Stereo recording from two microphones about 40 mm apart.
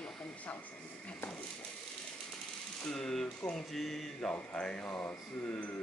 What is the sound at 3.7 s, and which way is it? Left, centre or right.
Mantra, centre.